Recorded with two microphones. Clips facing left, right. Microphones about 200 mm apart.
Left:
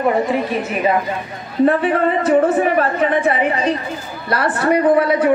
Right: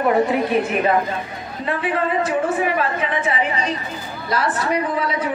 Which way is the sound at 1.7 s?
60° left (ahead or behind).